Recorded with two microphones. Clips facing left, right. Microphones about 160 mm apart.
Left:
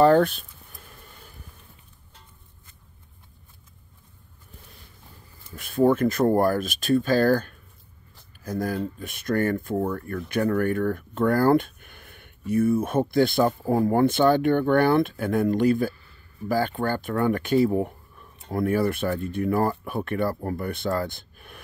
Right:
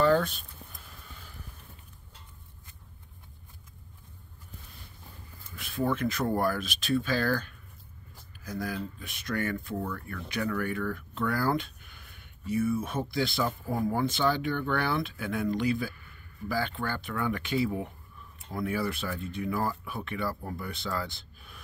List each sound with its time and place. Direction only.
5.6 s speech: 50° left (ahead or behind)
15.9 s a sound: 30° left (ahead or behind)
16.4 s speech: 45° left (ahead or behind)